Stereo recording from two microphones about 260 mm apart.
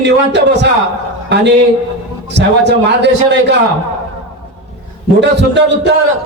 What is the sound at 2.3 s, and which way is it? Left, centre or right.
A man's voice, right.